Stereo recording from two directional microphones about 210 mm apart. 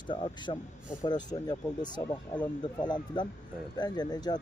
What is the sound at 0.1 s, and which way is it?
A man's voice, 20° left (ahead or behind).